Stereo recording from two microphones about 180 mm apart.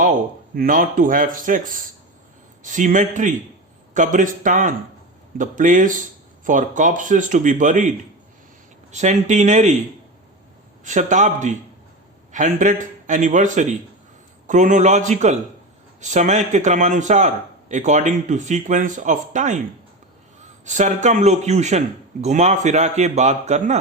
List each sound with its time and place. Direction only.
0.0 s a man's voice: 50° right (ahead or behind)
8.9 s a man's voice: 40° right (ahead or behind)
10.8 s a man's voice: 45° right (ahead or behind)
20.7 s a man's voice: 40° right (ahead or behind)